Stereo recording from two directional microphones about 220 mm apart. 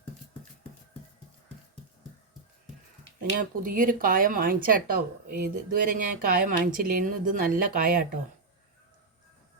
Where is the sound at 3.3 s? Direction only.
40° right (ahead or behind).